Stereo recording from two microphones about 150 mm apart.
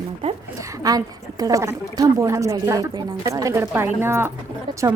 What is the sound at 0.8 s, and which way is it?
A woman's voice, 25° right (ahead or behind).